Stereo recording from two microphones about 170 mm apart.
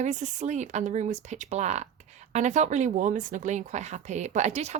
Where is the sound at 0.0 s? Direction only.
45° right (ahead or behind).